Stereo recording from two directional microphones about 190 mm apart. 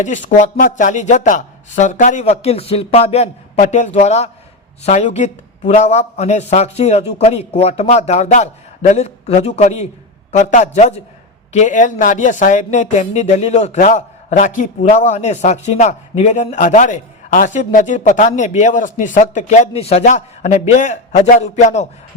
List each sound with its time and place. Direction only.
0.0 s a woman's voice: 40° left (ahead or behind)